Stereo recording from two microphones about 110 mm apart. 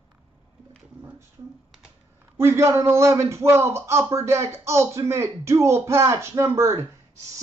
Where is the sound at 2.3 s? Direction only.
20° right (ahead or behind).